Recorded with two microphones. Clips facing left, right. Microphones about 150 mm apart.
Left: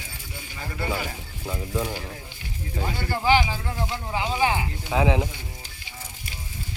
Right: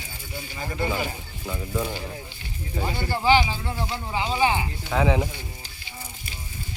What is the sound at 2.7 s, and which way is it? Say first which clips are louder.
Speech: right 1 dB; 10° right (ahead or behind).